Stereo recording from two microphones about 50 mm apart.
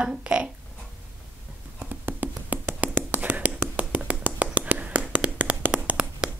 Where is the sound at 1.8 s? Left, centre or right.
Right.